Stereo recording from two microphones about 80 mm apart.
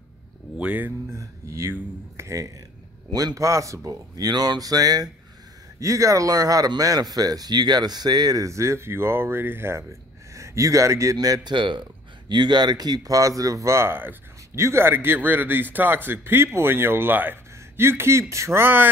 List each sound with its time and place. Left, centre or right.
0.6 s speech: centre
1.1 s speech: right
3.1 s speech: right
5.8 s a man's voice: right
11.5 s speech: right
12.3 s speech: right